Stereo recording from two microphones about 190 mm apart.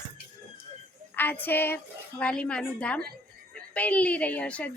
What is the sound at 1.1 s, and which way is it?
A woman's voice, 10° left (ahead or behind).